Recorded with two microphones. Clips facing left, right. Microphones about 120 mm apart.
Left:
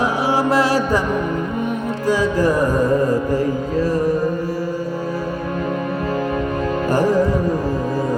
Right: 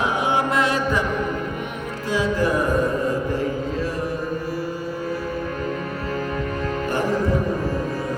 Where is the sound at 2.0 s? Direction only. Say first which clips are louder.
Left 4 dB; 40° left (ahead or behind).